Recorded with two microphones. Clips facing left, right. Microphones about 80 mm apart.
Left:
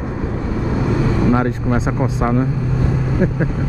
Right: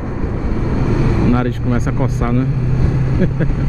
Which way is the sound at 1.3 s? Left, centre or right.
Centre.